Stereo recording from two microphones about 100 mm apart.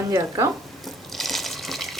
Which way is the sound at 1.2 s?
Centre (ahead or behind).